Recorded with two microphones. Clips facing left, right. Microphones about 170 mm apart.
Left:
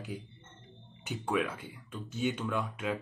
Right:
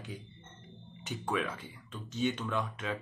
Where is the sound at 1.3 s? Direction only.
10° left (ahead or behind).